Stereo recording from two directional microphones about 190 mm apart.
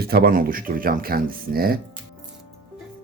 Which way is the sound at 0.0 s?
55° right (ahead or behind).